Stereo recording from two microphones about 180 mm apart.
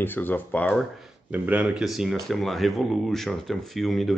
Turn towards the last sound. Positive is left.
turn(degrees=0)  # may be behind; listen again after turning